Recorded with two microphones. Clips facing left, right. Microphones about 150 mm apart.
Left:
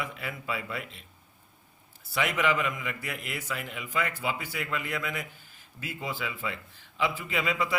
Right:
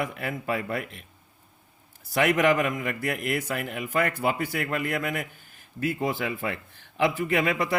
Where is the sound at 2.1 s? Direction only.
55° right (ahead or behind).